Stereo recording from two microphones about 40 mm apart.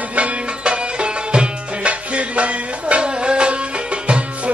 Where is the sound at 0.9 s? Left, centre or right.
Right.